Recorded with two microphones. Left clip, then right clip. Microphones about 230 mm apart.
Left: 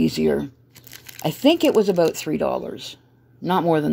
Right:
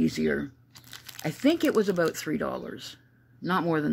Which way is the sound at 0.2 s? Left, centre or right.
Left.